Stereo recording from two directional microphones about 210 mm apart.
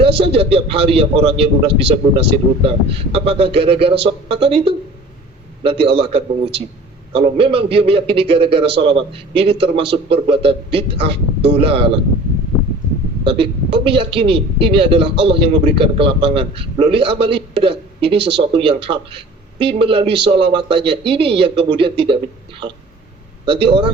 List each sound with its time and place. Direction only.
0.0 s a man's voice: 25° right (ahead or behind)
13.2 s a man's voice: 25° right (ahead or behind)
23.5 s a man's voice: 25° right (ahead or behind)